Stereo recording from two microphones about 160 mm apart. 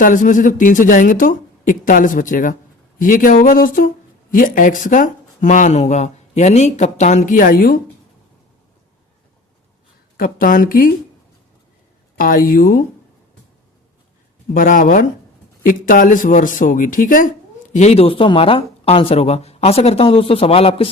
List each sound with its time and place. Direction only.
0.0 s speech: 55° left (ahead or behind)
10.2 s speech: 65° left (ahead or behind)
12.1 s speech: 60° left (ahead or behind)
14.5 s speech: 60° left (ahead or behind)
17.7 s speech: 40° left (ahead or behind)